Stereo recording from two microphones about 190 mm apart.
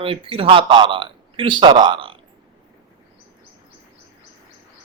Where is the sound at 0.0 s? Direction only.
30° right (ahead or behind).